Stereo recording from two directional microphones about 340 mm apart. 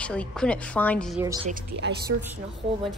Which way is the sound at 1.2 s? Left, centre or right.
Centre.